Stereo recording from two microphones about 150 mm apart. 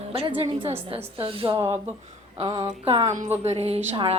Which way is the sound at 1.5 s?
20° right (ahead or behind).